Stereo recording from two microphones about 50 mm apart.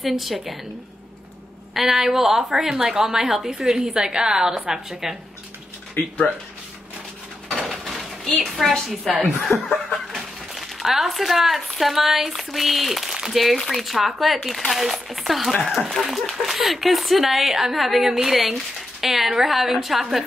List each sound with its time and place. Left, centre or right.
0.0 s speech: centre
1.7 s a woman's voice: centre
6.0 s speech: left
7.5 s a sound: centre
9.2 s speech: centre